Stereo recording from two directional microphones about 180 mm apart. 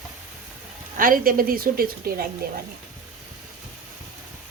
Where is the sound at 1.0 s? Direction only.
50° right (ahead or behind).